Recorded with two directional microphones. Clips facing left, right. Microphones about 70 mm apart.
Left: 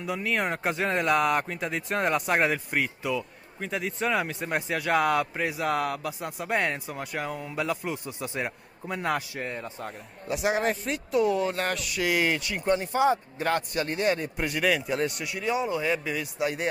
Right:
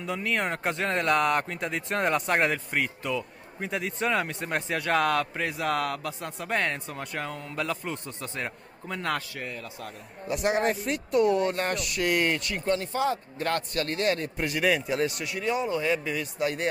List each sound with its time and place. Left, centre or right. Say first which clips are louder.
0.0 s speech: left 1 dB; centre
9.4 s a man's voice: left 3 dB; left
10.2 s speech: right 1 dB; centre
12.6 s speech: left 4 dB; centre